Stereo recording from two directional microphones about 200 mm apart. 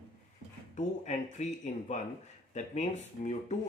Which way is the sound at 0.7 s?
35° left (ahead or behind).